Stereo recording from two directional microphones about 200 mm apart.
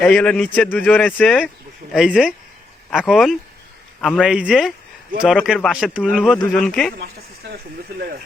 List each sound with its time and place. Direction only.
0.0 s speech: 5° left (ahead or behind)
7.5 s speech: 50° right (ahead or behind)